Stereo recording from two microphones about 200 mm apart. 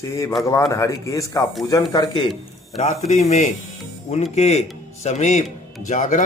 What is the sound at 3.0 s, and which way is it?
A man's voice, 35° left (ahead or behind).